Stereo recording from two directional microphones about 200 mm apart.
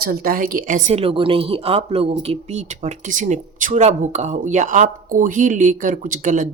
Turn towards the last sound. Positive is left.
turn(degrees=-40)  # may be behind; listen again after turning